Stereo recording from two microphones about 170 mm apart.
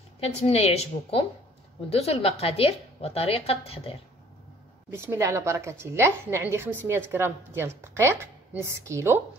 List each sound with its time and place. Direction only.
0.2 s a woman's voice: 40° left (ahead or behind)
4.9 s a woman's voice: 15° right (ahead or behind)